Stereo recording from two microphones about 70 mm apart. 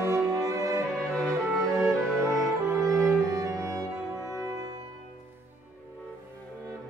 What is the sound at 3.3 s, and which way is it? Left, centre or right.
Music, right.